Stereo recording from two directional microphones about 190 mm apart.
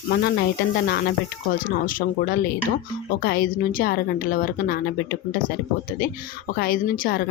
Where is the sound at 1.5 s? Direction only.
50° left (ahead or behind).